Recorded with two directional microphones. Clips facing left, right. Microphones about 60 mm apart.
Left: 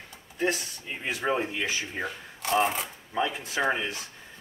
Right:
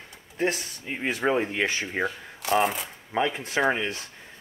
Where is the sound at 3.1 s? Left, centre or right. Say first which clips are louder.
Right 4 dB; right.